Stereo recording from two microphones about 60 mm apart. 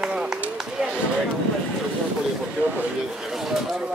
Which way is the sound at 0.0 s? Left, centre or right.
Centre.